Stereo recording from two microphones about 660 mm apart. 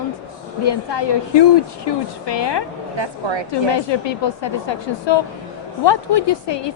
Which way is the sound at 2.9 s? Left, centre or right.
Right.